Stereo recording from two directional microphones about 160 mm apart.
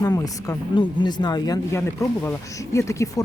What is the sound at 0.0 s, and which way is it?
Speech, 25° left (ahead or behind).